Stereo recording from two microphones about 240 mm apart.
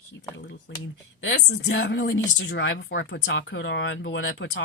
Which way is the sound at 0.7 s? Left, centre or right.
Left.